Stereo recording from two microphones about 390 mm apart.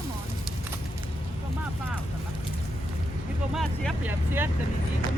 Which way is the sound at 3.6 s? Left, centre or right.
Centre.